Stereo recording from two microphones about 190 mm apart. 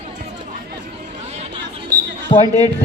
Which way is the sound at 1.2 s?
35° right (ahead or behind).